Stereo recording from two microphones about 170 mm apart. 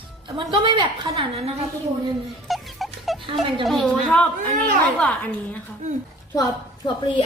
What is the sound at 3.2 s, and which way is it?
Speech, 30° right (ahead or behind).